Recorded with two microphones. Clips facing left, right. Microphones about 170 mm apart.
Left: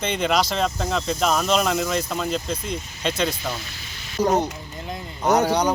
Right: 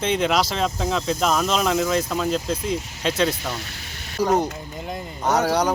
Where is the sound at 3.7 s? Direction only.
55° right (ahead or behind).